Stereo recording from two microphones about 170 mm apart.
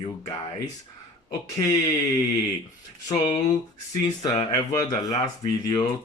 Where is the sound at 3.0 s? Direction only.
25° left (ahead or behind).